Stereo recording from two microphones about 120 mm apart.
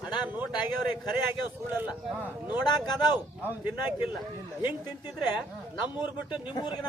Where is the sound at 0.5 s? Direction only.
35° left (ahead or behind).